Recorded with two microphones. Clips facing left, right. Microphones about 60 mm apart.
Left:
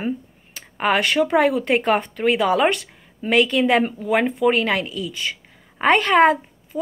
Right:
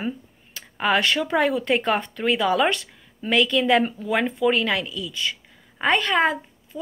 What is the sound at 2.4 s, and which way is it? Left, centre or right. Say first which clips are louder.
Speech: left 2 dB; left.